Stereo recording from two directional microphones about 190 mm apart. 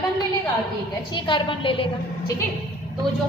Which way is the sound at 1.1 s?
25° left (ahead or behind).